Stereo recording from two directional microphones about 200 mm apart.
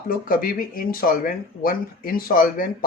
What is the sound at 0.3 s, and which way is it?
Speech, 45° left (ahead or behind).